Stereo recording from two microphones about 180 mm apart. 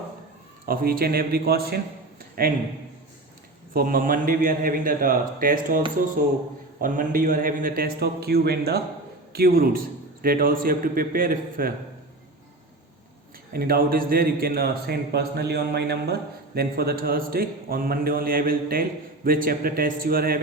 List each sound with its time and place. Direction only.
0.6 s a man's voice: 55° right (ahead or behind)
3.8 s a man's voice: 50° right (ahead or behind)
6.8 s a man's voice: 45° right (ahead or behind)
13.5 s a man's voice: 55° right (ahead or behind)